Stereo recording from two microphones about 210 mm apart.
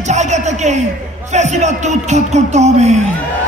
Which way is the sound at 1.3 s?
35° right (ahead or behind).